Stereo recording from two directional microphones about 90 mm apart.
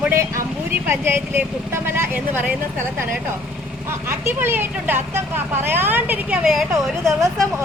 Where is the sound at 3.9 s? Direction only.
25° right (ahead or behind).